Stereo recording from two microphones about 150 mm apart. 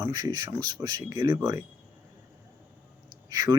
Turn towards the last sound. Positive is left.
turn(degrees=-25)  # may be behind; listen again after turning